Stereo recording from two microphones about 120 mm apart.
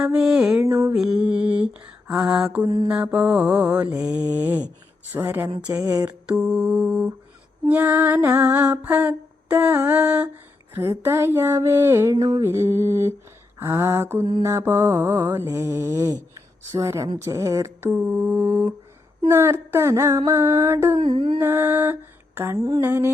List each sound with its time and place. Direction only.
0.0 s mantra: 5° right (ahead or behind)
0.6 s mantra: 30° right (ahead or behind)
0.9 s mantra: 5° right (ahead or behind)
5.8 s mantra: 30° right (ahead or behind)
6.1 s mantra: 10° right (ahead or behind)
8.8 s humming: 15° right (ahead or behind)
9.6 s mantra: 15° right (ahead or behind)
10.8 s mantra: 20° right (ahead or behind)
21.0 s mantra: 45° right (ahead or behind)
21.3 s mantra: 20° right (ahead or behind)
22.5 s mantra: 30° right (ahead or behind)
22.8 s mantra: 20° right (ahead or behind)